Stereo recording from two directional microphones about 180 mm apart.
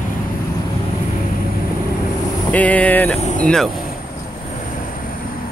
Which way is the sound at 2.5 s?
10° left (ahead or behind).